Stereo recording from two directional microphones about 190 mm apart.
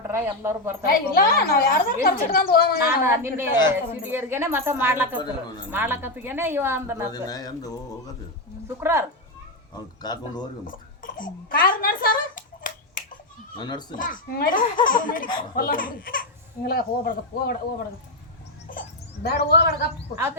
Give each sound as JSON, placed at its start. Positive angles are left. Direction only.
{"t": 0.1, "sound": "speech", "side_deg": -15}
{"t": 0.9, "sound": "speech", "side_deg": 50}
{"t": 2.8, "sound": "speech", "side_deg": -15}
{"t": 7.1, "sound": "speech", "side_deg": 20}
{"t": 8.8, "sound": "speech", "side_deg": -15}
{"t": 10.0, "sound": "speech", "side_deg": 20}
{"t": 10.7, "sound": "a sound", "side_deg": 45}
{"t": 13.6, "sound": "speech", "side_deg": 20}
{"t": 13.9, "sound": "speech", "side_deg": 45}
{"t": 18.7, "sound": "a sound", "side_deg": 50}